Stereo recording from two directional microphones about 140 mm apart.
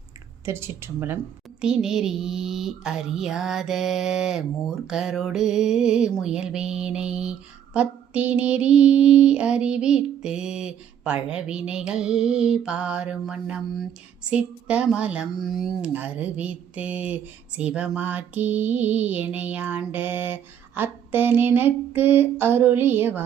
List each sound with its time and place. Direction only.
0.4 s mantra: 20° right (ahead or behind)
1.6 s mantra: 5° right (ahead or behind)